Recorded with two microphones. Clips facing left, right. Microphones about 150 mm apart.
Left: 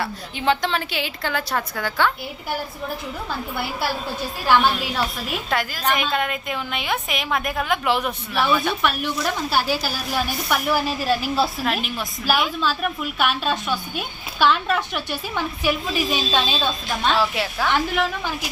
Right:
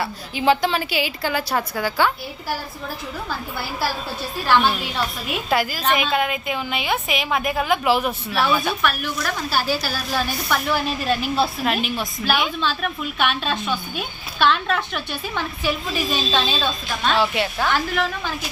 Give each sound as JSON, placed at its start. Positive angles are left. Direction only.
{"t": 0.0, "sound": "a woman's voice", "side_deg": -5}
{"t": 5.3, "sound": "a woman's voice", "side_deg": -5}
{"t": 8.8, "sound": "a woman's voice", "side_deg": 25}
{"t": 17.2, "sound": "a woman's voice", "side_deg": 0}
{"t": 17.7, "sound": "a woman's voice", "side_deg": 20}